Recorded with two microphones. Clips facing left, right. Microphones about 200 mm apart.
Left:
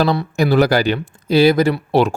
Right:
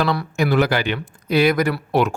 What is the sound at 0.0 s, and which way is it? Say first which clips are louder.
Speech: left 4 dB; 30° left (ahead or behind).